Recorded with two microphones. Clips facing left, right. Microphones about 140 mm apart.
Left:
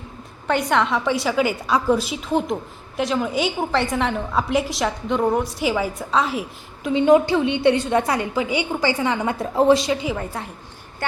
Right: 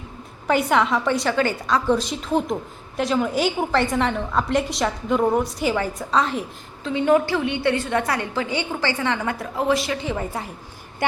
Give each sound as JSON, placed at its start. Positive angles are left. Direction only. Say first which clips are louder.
{"t": 0.4, "sound": "a woman's voice", "louder": "right 1 dB", "side_deg": -5}
{"t": 6.8, "sound": "a woman's voice", "louder": "left 3 dB", "side_deg": 20}
{"t": 9.4, "sound": "speech", "louder": "left 9 dB", "side_deg": 25}
{"t": 10.2, "sound": "a woman's voice", "louder": "right 1 dB", "side_deg": -5}